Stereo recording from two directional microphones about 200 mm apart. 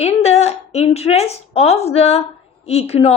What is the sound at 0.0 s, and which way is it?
A woman's voice, 30° left (ahead or behind).